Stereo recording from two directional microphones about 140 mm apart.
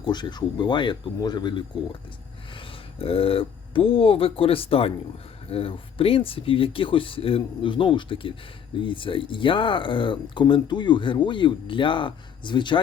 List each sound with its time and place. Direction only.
0.0 s speech: 35° left (ahead or behind)
2.6 s speech: 45° left (ahead or behind)